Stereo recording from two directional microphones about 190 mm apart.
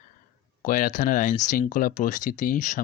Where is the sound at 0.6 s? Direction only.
45° left (ahead or behind).